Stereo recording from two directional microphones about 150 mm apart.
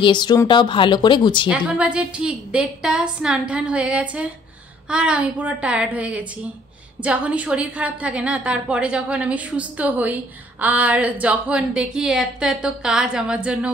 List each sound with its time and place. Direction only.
0.0 s speech: 30° left (ahead or behind)
1.5 s a woman's voice: 10° right (ahead or behind)